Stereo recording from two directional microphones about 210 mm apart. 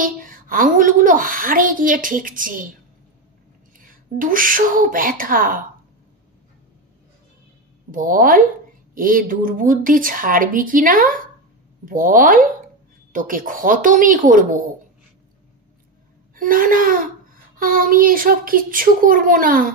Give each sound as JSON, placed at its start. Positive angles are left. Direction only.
{"t": 0.0, "sound": "a woman's voice", "side_deg": -40}
{"t": 3.7, "sound": "speech", "side_deg": -40}
{"t": 7.9, "sound": "a woman's voice", "side_deg": -40}
{"t": 16.3, "sound": "a woman's voice", "side_deg": -40}